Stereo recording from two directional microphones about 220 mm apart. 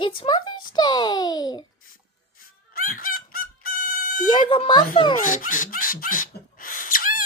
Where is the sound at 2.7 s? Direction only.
40° left (ahead or behind).